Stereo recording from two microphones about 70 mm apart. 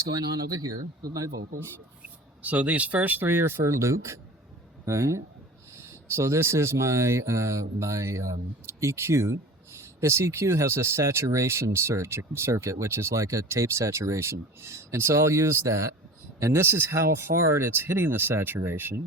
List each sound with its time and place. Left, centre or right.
0.1 s speech: right
2.0 s speech: right